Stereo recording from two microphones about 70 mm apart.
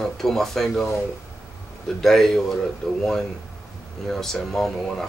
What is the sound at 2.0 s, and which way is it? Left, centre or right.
Speech, centre.